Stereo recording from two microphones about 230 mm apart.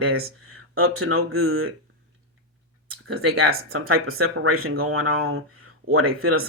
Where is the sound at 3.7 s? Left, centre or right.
Right.